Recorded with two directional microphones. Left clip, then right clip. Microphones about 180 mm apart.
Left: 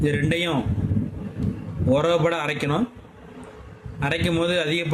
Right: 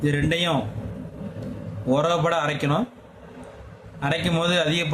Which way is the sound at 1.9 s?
20° left (ahead or behind).